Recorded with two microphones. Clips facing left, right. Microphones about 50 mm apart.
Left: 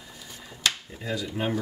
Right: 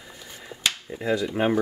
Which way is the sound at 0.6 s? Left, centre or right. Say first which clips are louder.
Right 1 dB; right.